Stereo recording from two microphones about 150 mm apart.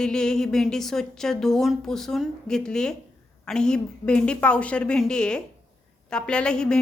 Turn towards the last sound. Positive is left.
turn(degrees=5)  # may be behind; listen again after turning